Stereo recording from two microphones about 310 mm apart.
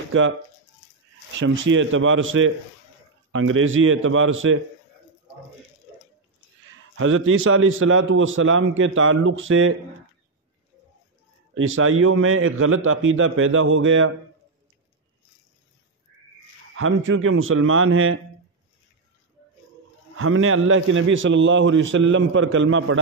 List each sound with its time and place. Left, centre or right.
1.4 s a man's voice: right
7.0 s a man's voice: right
11.5 s a man's voice: right
16.7 s a man's voice: right
20.2 s a man's voice: right